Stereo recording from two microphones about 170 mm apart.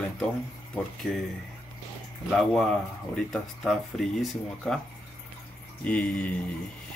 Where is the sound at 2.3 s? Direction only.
5° left (ahead or behind).